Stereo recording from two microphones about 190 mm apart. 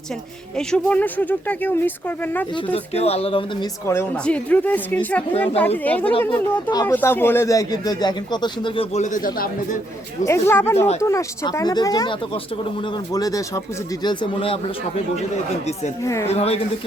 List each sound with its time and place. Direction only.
0.5 s speech: 5° left (ahead or behind)
2.7 s speech: 35° left (ahead or behind)
3.8 s speech: 10° left (ahead or behind); by 9.7 s 45° left (ahead or behind)
10.2 s speech: 15° left (ahead or behind); by 15.2 s 30° left (ahead or behind)
16.0 s speech: 15° left (ahead or behind)
16.3 s speech: 30° left (ahead or behind)